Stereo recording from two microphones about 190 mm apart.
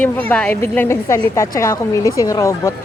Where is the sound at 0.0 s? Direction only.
10° left (ahead or behind).